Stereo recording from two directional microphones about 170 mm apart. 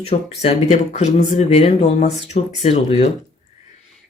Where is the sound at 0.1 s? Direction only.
40° left (ahead or behind).